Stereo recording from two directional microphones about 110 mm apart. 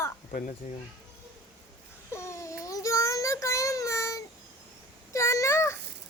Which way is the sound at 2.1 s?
25° left (ahead or behind).